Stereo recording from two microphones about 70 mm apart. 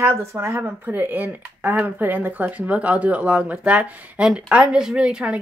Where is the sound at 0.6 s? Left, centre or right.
Right.